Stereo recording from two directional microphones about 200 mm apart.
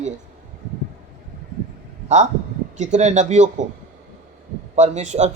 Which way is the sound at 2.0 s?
35° right (ahead or behind).